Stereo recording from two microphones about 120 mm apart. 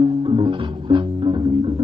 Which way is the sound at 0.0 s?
40° right (ahead or behind).